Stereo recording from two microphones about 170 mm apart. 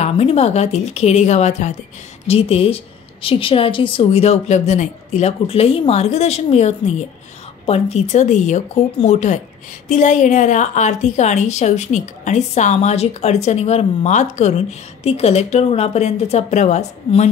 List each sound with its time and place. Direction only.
0.0 s a woman's voice: 35° left (ahead or behind)